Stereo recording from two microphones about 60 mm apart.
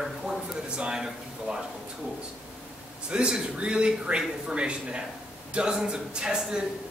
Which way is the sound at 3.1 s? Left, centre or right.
Centre.